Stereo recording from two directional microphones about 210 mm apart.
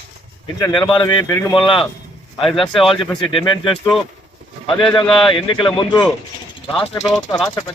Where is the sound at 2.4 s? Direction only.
Centre (ahead or behind).